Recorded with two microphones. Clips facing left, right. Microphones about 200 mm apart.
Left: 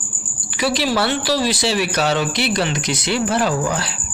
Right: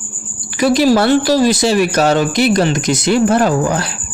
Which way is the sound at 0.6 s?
45° right (ahead or behind).